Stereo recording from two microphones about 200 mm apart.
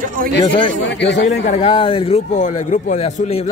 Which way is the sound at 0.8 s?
60° left (ahead or behind).